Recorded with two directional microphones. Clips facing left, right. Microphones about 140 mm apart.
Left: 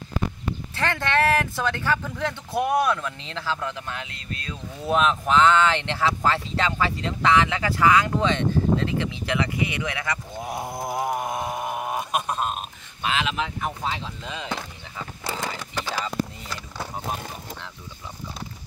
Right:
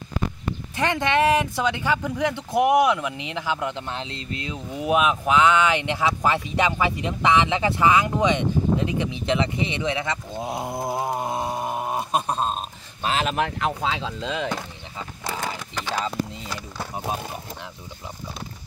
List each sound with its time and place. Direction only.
0.7 s speech: 15° right (ahead or behind)
13.0 s speech: 40° right (ahead or behind)
13.6 s speech: 90° right
15.2 s horse: centre (ahead or behind)